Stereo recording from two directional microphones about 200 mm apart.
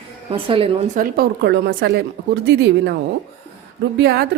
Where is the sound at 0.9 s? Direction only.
50° right (ahead or behind).